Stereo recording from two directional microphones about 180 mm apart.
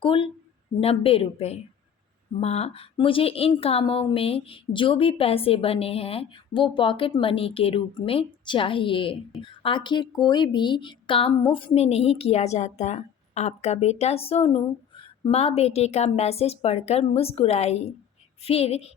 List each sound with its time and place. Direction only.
0.0 s speech: 30° left (ahead or behind)